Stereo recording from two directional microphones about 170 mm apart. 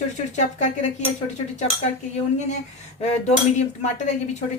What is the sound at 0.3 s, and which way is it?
Speech, 45° left (ahead or behind).